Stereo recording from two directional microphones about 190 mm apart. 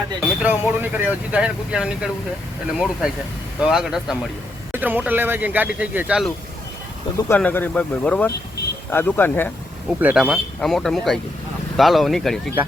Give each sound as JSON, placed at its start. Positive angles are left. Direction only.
{"t": 0.2, "sound": "speech", "side_deg": -10}
{"t": 7.3, "sound": "speech", "side_deg": 10}
{"t": 10.0, "sound": "speech", "side_deg": -5}